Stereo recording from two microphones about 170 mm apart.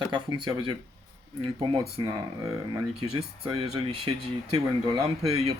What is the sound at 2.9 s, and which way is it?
Speech, 35° right (ahead or behind).